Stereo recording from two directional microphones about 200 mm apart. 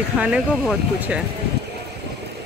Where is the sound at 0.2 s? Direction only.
5° right (ahead or behind).